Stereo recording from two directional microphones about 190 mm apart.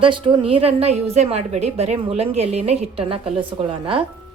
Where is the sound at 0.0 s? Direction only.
25° right (ahead or behind).